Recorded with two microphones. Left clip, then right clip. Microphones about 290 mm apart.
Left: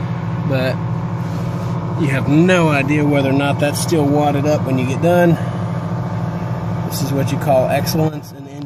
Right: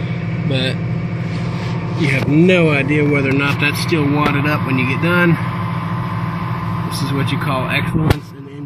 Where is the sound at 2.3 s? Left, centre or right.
Left; by 5.4 s centre.